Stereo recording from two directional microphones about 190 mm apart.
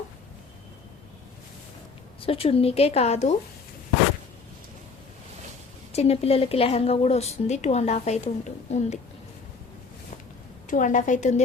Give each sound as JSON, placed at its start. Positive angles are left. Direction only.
{"t": 2.2, "sound": "a woman's voice", "side_deg": 30}
{"t": 5.9, "sound": "a woman's voice", "side_deg": 35}
{"t": 10.7, "sound": "a woman's voice", "side_deg": 45}